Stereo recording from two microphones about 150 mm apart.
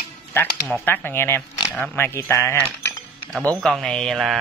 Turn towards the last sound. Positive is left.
turn(degrees=0)  # may be behind; listen again after turning